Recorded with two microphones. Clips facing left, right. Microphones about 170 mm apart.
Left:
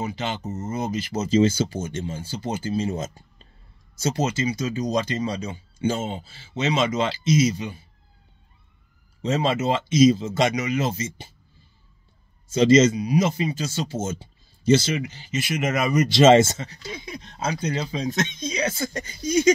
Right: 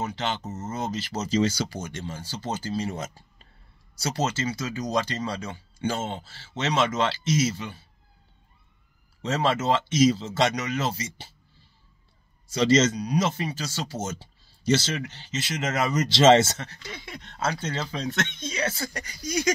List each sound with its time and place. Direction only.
0.0 s speech: 15° left (ahead or behind)
9.2 s speech: 15° left (ahead or behind)
12.4 s speech: 20° left (ahead or behind)
18.1 s speech: 70° right (ahead or behind)
18.4 s speech: 20° left (ahead or behind)